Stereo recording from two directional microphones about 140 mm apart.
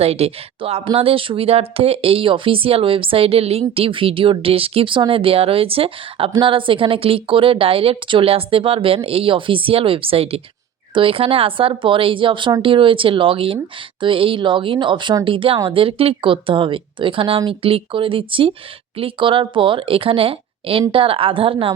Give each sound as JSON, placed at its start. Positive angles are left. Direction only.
{"t": 0.0, "sound": "speech", "side_deg": -45}